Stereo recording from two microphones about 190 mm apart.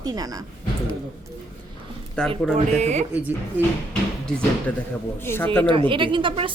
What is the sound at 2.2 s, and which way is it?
Speech, 5° left (ahead or behind).